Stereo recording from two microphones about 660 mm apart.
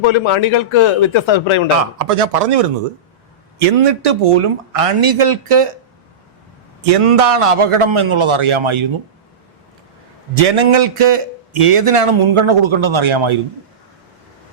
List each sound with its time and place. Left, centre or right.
0.0 s speech: left
1.7 s a man's voice: right
6.8 s a man's voice: right
10.3 s a man's voice: right